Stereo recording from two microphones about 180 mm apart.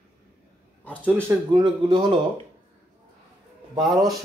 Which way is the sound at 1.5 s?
25° right (ahead or behind).